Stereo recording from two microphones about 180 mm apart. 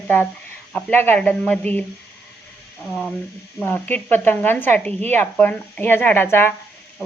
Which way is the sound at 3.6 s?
10° left (ahead or behind).